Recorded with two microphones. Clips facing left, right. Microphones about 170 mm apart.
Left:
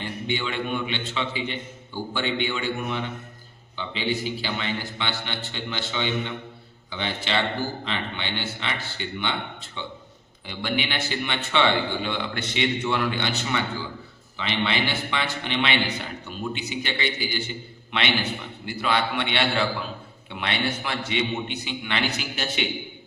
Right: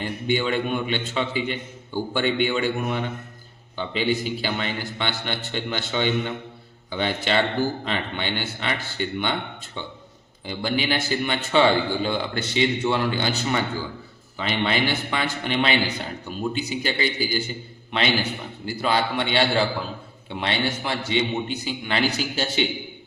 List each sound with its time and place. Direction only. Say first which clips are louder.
0.0 s a man's voice: right 5 dB; 45° right (ahead or behind)
10.4 s a man's voice: right 3 dB; 35° right (ahead or behind)
18.6 s a man's voice: right 2 dB; 35° right (ahead or behind)